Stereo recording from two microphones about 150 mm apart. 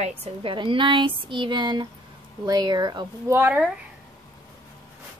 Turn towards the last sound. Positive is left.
turn(degrees=-10)  # may be behind; listen again after turning